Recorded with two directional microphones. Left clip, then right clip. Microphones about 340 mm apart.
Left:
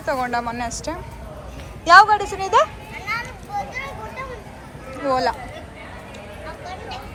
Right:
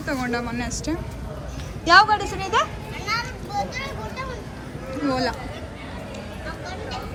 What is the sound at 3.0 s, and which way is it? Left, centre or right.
Children playing, centre.